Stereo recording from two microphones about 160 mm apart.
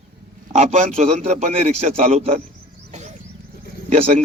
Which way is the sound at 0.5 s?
45° right (ahead or behind).